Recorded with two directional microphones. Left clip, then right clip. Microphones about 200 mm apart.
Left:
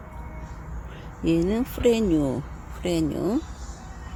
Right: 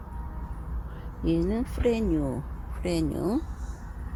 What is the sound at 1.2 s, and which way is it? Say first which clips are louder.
Speech: left 4 dB; 20° left (ahead or behind).